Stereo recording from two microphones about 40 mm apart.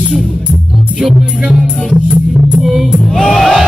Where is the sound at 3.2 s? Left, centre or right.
Centre.